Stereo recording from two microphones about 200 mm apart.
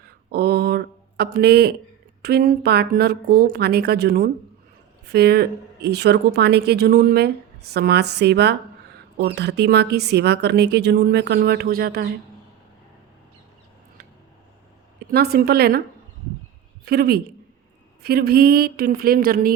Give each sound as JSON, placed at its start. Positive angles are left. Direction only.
{"t": 0.3, "sound": "a sound", "side_deg": -50}
{"t": 2.2, "sound": "a woman's voice", "side_deg": -45}
{"t": 15.1, "sound": "a woman's voice", "side_deg": -50}
{"t": 16.8, "sound": "a woman's voice", "side_deg": -50}